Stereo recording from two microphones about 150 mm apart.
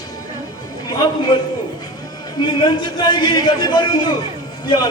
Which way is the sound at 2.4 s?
30° left (ahead or behind).